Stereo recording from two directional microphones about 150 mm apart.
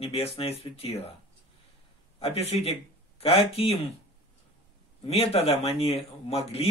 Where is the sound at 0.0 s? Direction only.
40° left (ahead or behind).